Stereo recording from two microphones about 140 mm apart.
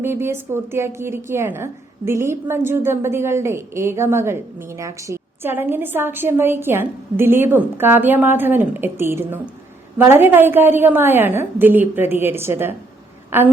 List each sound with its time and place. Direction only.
0.0 s a woman's voice: 15° right (ahead or behind)